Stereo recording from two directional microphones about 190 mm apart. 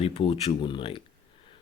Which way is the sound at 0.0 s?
30° left (ahead or behind).